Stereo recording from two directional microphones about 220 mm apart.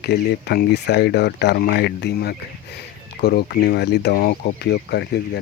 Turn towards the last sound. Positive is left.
turn(degrees=50)  # may be behind; listen again after turning